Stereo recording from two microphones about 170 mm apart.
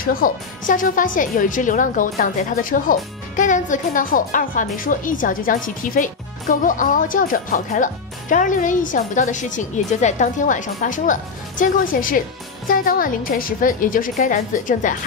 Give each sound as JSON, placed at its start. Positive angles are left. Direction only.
{"t": 0.0, "sound": "a woman's voice", "side_deg": 55}